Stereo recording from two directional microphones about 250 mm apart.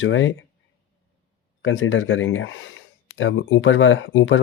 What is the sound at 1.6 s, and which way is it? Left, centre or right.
Speech, left.